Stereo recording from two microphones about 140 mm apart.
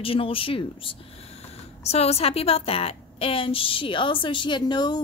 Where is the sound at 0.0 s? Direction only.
40° left (ahead or behind).